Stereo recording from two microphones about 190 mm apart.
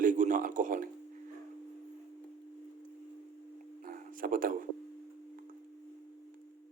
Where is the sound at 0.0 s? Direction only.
45° right (ahead or behind).